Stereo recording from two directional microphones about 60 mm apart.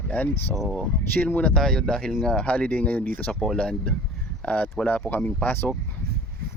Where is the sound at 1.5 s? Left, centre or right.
Centre; by 3.3 s left.